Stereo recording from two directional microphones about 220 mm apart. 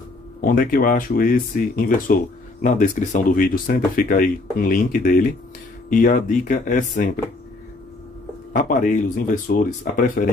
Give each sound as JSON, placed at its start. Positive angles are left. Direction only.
{"t": 0.4, "sound": "speech", "side_deg": 40}
{"t": 8.5, "sound": "speech", "side_deg": 40}